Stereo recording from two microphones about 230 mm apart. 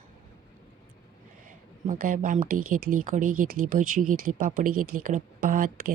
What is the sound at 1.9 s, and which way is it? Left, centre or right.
Speech, right.